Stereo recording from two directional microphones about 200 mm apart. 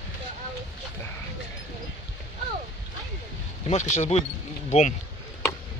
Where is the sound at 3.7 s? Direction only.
35° left (ahead or behind).